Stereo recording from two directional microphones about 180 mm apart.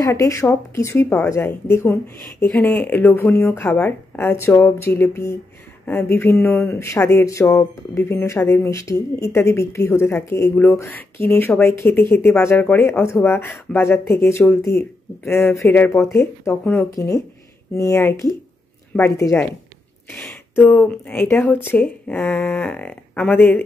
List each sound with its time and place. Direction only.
0.0 s speech: 20° left (ahead or behind)
20.5 s speech: 10° left (ahead or behind)